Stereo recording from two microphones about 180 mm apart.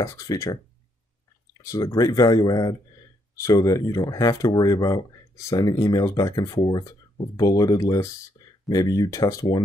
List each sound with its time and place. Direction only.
0.0 s speech: 20° left (ahead or behind)